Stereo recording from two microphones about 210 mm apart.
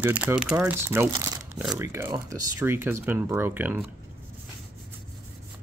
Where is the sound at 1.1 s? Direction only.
15° right (ahead or behind).